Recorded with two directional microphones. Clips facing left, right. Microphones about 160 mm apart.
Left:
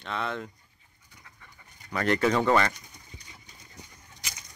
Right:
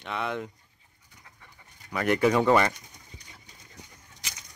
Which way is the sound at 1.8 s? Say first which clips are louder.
Right 1 dB; 10° right (ahead or behind).